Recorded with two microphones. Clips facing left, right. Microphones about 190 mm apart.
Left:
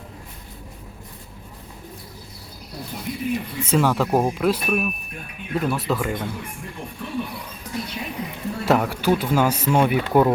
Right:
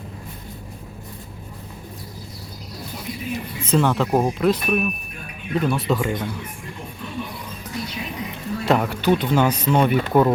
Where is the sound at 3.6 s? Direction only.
10° left (ahead or behind).